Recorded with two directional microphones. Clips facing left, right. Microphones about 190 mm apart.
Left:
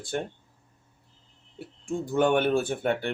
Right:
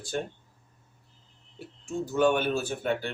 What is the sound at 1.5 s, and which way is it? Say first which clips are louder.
Speech: left 2 dB; 55° left (ahead or behind).